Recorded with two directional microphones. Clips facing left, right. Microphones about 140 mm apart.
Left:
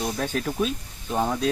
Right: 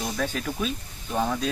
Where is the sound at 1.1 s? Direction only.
15° left (ahead or behind).